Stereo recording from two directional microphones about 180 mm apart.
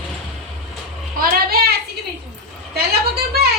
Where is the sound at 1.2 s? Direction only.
55° right (ahead or behind).